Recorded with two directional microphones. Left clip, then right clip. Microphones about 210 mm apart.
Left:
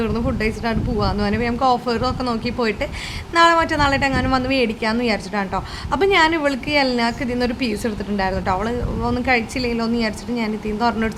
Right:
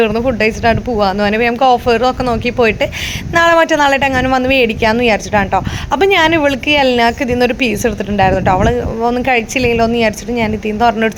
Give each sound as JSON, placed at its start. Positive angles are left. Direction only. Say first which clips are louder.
{"t": 0.0, "sound": "a woman's voice", "louder": "right 10 dB", "side_deg": -15}